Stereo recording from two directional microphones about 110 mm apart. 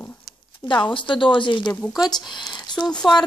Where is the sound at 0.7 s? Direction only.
45° left (ahead or behind).